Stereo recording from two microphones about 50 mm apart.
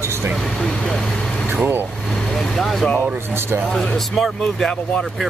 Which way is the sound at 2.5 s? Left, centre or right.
Centre.